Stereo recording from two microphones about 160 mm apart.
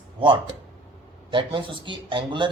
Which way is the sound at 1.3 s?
30° right (ahead or behind).